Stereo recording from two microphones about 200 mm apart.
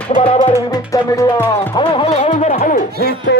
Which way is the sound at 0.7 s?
15° left (ahead or behind).